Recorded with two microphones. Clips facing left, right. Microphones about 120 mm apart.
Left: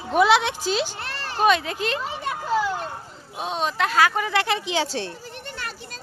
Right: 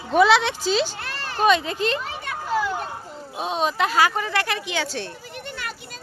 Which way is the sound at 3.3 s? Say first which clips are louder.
Right 2 dB; centre (ahead or behind).